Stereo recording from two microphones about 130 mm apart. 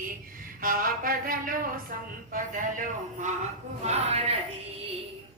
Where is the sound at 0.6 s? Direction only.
90° right.